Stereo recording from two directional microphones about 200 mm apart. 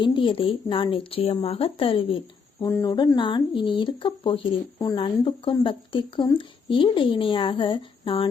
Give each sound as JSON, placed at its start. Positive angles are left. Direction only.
{"t": 0.0, "sound": "speech", "side_deg": 25}
{"t": 2.6, "sound": "speech", "side_deg": 15}